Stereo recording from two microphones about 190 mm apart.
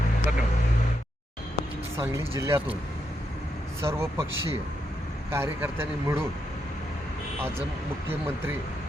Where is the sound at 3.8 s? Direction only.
15° right (ahead or behind).